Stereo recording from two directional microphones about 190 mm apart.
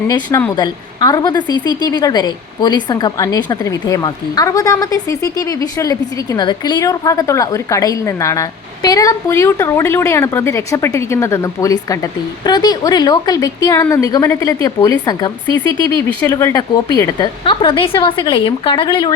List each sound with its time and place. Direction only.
0.1 s a woman's voice: 20° left (ahead or behind)